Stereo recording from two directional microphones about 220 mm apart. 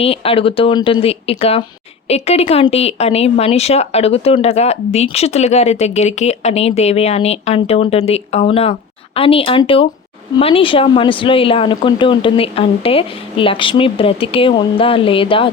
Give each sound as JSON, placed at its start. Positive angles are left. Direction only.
{"t": 0.0, "sound": "a woman's voice", "side_deg": 25}